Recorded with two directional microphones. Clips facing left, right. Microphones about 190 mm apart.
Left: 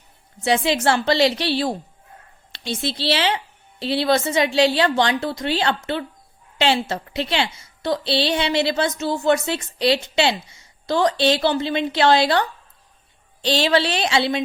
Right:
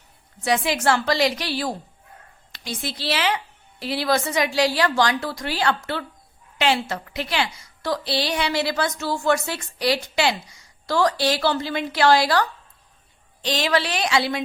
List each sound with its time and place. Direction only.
0.4 s a woman's voice: 25° left (ahead or behind)